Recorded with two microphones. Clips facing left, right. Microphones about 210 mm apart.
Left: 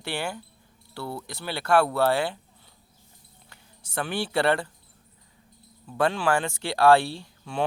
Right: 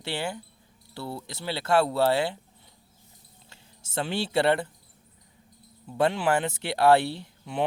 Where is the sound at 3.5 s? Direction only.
25° right (ahead or behind).